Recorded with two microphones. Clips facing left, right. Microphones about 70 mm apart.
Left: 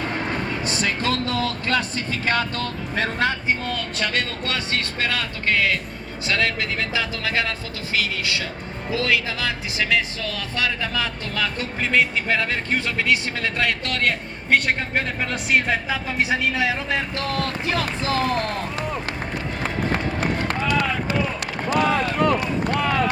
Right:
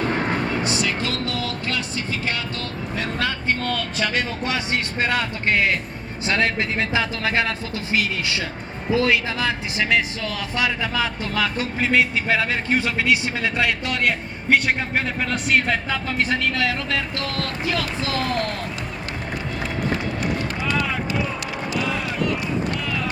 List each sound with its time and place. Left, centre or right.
0.6 s speech: left
3.5 s speech: centre; by 10.0 s right
10.5 s a man's voice: centre; by 18.6 s left
19.6 s run: left
21.7 s speech: left